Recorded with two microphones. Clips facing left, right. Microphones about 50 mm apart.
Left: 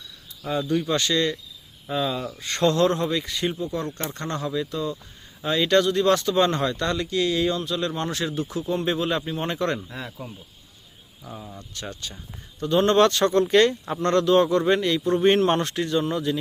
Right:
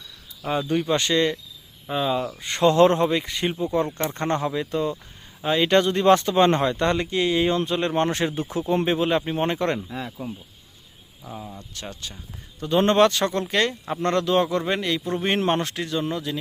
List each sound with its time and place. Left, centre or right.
0.7 s speech: right
5.4 s speech: centre
9.9 s speech: centre
15.6 s speech: centre